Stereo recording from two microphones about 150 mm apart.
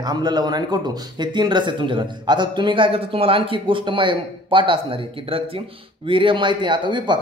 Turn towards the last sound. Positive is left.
turn(degrees=-30)  # may be behind; listen again after turning